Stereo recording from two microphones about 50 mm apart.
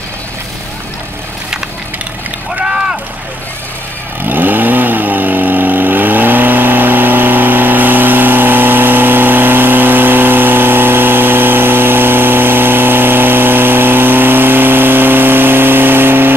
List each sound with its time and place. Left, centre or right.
2.5 s boat: centre
4.3 s vehicle: right